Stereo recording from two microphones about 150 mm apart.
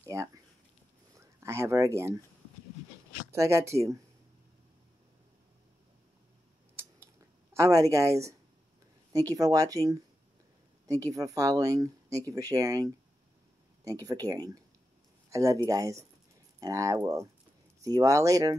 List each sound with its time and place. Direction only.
0.0 s speech: 20° right (ahead or behind)
3.3 s speech: 20° right (ahead or behind)
7.5 s speech: 20° right (ahead or behind)